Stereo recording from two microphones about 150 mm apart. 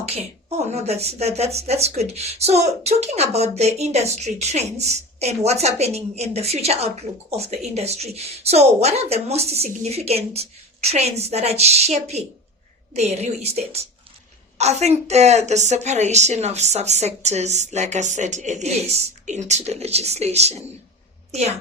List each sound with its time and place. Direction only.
0.0 s a woman's voice: 45° right (ahead or behind)